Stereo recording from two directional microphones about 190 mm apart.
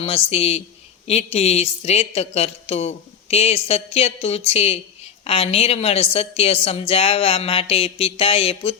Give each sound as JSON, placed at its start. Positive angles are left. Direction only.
{"t": 0.0, "sound": "a woman's voice", "side_deg": 30}